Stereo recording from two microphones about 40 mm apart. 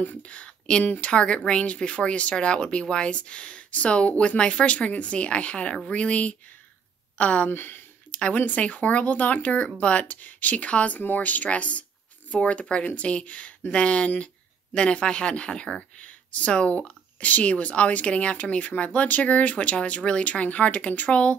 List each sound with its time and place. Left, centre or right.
0.0 s speech: left
0.3 s speech: left
7.4 s speech: left
8.1 s a sound: left
8.4 s speech: left
11.0 s speech: left
16.0 s speech: left